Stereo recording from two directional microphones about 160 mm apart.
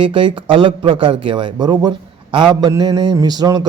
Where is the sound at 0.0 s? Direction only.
30° right (ahead or behind).